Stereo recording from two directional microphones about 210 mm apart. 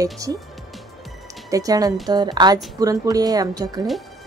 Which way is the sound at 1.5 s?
15° right (ahead or behind).